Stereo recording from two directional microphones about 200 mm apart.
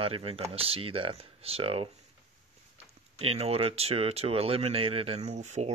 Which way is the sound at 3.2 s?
30° right (ahead or behind).